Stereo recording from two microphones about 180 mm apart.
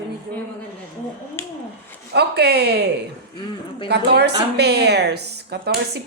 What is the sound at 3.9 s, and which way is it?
A woman's voice, 65° right (ahead or behind).